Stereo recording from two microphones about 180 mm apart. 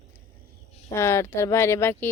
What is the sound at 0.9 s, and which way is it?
Speech, 15° left (ahead or behind).